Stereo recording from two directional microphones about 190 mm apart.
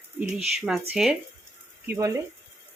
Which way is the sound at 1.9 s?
15° right (ahead or behind).